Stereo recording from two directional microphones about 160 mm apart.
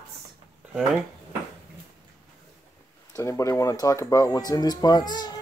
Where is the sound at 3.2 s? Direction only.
20° left (ahead or behind).